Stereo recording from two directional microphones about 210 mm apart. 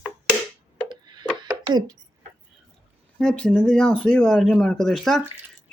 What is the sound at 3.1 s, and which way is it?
Speech, 5° left (ahead or behind).